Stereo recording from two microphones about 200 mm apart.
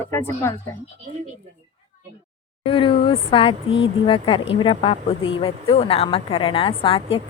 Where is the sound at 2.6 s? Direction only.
25° left (ahead or behind).